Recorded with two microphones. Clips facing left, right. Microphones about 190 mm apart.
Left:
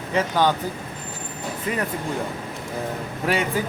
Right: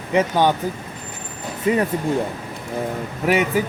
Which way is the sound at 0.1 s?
15° right (ahead or behind).